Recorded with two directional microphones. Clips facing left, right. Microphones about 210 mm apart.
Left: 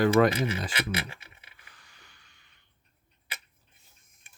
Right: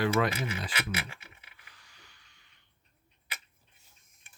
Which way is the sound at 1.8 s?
50° left (ahead or behind).